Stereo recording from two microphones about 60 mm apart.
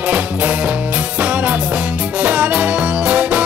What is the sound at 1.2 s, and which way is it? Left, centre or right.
Music, right.